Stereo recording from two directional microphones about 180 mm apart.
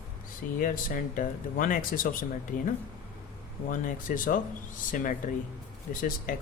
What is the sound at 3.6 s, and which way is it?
Speech, 45° left (ahead or behind).